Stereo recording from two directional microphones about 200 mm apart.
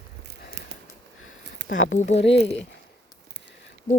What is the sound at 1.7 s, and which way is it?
Speech, 70° left (ahead or behind).